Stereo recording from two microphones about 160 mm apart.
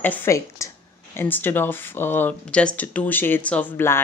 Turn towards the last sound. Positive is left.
turn(degrees=15)  # may be behind; listen again after turning